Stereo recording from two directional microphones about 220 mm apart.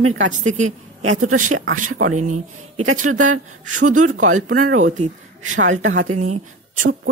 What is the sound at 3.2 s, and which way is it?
Speech, 35° right (ahead or behind).